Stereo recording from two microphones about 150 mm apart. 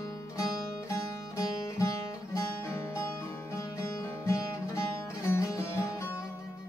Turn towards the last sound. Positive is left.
turn(degrees=20)  # may be behind; listen again after turning